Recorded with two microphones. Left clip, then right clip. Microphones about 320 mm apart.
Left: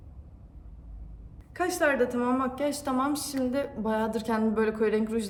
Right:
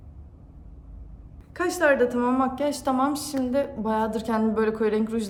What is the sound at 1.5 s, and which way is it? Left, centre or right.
A woman's voice, centre.